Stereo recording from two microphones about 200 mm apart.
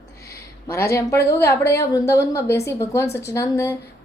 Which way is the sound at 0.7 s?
15° left (ahead or behind).